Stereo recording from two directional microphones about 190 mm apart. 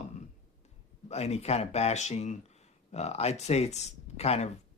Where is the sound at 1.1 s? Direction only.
35° left (ahead or behind).